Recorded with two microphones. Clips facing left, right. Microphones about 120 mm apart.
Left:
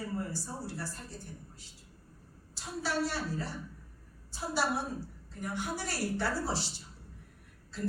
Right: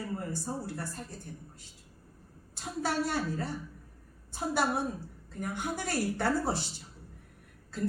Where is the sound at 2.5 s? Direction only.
50° right (ahead or behind).